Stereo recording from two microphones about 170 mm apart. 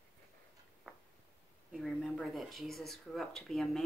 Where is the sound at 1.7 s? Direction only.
Centre (ahead or behind).